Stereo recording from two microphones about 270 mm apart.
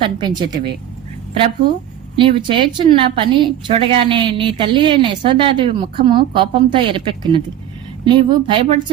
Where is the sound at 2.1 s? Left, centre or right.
Centre.